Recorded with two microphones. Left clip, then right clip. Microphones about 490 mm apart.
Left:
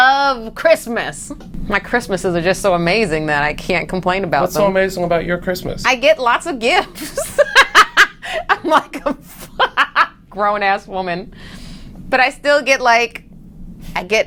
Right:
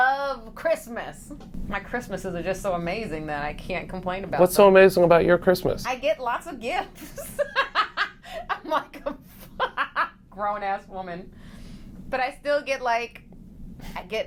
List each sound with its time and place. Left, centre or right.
0.0 s a sound: left
1.7 s a woman's voice: left
4.4 s speech: right
5.8 s a woman's voice: left
9.6 s a sound: left
12.1 s a woman's voice: left